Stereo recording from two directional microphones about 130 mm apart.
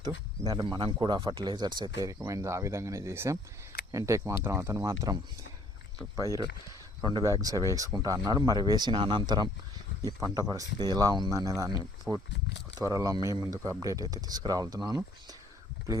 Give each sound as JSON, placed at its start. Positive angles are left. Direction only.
{"t": 0.0, "sound": "speech", "side_deg": -30}
{"t": 12.1, "sound": "speech", "side_deg": -10}
{"t": 12.8, "sound": "speech", "side_deg": -25}